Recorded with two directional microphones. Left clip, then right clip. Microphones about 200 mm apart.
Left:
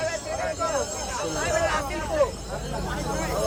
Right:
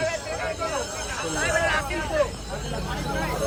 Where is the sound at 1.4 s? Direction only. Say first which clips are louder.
Right 2 dB; 50° left (ahead or behind).